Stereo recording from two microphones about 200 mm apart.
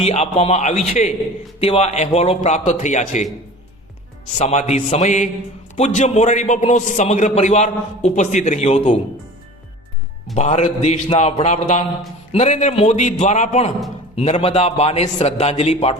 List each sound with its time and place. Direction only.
0.0 s a man's voice: 30° left (ahead or behind)
4.4 s a man's voice: 35° left (ahead or behind)
10.3 s a man's voice: 35° left (ahead or behind)